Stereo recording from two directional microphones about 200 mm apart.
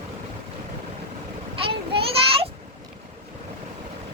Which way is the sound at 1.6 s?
25° right (ahead or behind).